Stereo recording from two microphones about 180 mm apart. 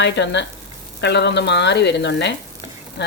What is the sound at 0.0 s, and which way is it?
Speech, 75° left (ahead or behind).